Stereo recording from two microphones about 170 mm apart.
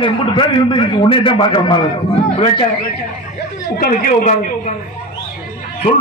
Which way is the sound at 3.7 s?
50° left (ahead or behind).